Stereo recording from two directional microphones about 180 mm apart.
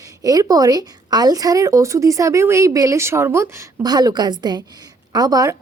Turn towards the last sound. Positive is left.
turn(degrees=-20)  # may be behind; listen again after turning